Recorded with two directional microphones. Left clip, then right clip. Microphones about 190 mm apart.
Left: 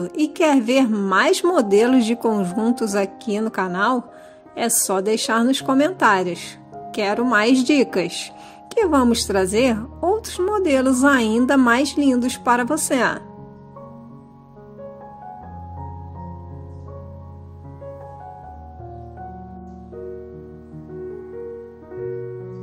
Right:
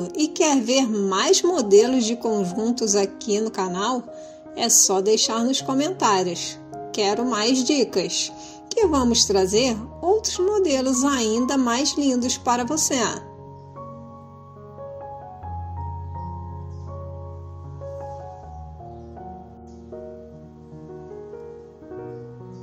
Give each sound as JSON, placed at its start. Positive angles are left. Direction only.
{"t": 0.4, "sound": "a woman's voice", "side_deg": 50}